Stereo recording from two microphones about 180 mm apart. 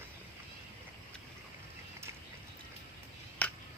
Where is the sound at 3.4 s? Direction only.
10° left (ahead or behind).